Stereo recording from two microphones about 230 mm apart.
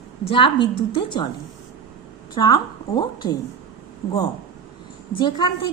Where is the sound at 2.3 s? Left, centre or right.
Centre.